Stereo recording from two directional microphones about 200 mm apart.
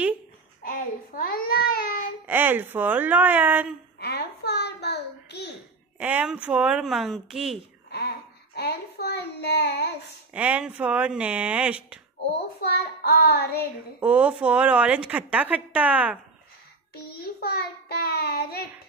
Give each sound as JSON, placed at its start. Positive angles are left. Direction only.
{"t": 0.7, "sound": "a child's voice", "side_deg": 45}
{"t": 2.2, "sound": "speech", "side_deg": -10}
{"t": 4.0, "sound": "a sound", "side_deg": 55}
{"t": 5.9, "sound": "speech", "side_deg": -10}
{"t": 8.5, "sound": "child singing", "side_deg": 55}
{"t": 10.3, "sound": "speech", "side_deg": -5}
{"t": 12.6, "sound": "child singing", "side_deg": 55}
{"t": 13.9, "sound": "speech", "side_deg": -5}
{"t": 16.9, "sound": "child singing", "side_deg": 50}